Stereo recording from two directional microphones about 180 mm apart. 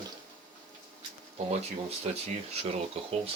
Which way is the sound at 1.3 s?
35° right (ahead or behind).